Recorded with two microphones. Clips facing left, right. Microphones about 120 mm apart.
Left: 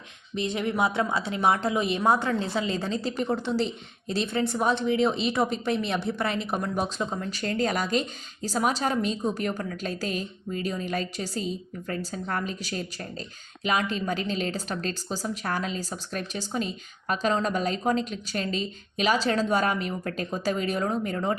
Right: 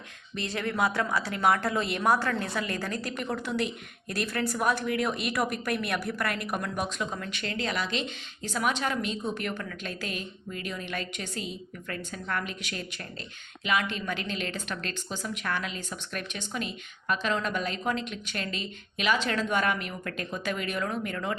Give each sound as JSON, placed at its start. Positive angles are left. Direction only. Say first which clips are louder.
{"t": 0.3, "sound": "a woman's voice", "louder": "left 3 dB", "side_deg": 20}
{"t": 5.9, "sound": "a woman's voice", "louder": "left 3 dB", "side_deg": 25}